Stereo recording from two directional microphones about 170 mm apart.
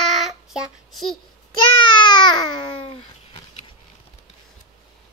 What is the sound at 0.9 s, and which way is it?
Speech, centre (ahead or behind).